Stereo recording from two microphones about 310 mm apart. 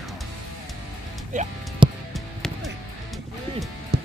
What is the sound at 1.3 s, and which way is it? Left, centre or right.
Music, right.